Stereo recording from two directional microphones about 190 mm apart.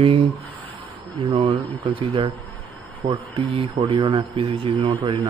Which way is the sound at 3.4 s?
30° right (ahead or behind).